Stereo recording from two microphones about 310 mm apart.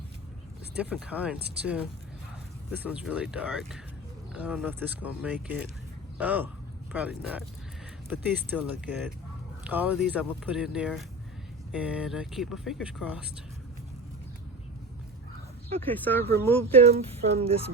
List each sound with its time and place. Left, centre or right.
0.8 s speech: centre
15.8 s speech: centre
16.7 s speech: centre